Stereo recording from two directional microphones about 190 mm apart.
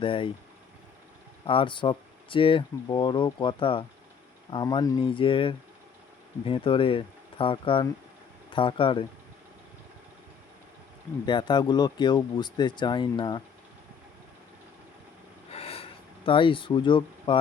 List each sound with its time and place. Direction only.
0.0 s speech: 25° left (ahead or behind)
1.5 s speech: 25° left (ahead or behind)
11.3 s speech: 25° left (ahead or behind)
15.5 s a sound: 30° left (ahead or behind)